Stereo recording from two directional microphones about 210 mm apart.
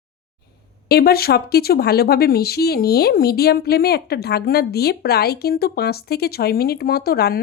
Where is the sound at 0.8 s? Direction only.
45° left (ahead or behind).